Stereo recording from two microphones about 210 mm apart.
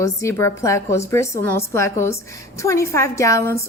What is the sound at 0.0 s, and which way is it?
A woman's voice, 15° left (ahead or behind).